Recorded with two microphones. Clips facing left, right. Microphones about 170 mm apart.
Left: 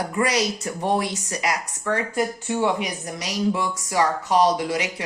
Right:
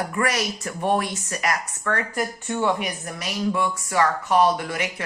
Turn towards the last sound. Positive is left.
turn(degrees=15)  # may be behind; listen again after turning